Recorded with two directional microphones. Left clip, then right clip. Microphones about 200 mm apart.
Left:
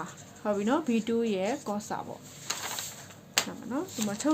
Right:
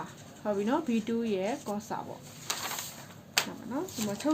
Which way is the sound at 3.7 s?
30° left (ahead or behind).